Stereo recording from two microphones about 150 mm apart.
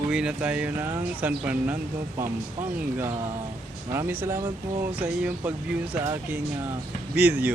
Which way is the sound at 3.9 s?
15° right (ahead or behind).